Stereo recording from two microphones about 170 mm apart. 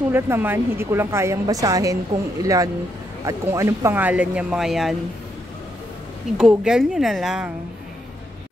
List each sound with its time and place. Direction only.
0.1 s speech: 10° right (ahead or behind)
6.3 s a woman's voice: 5° right (ahead or behind)